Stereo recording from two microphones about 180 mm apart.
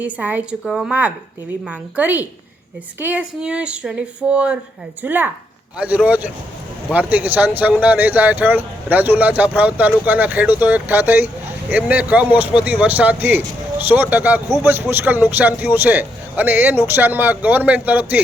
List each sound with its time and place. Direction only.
0.0 s speech: 10° right (ahead or behind)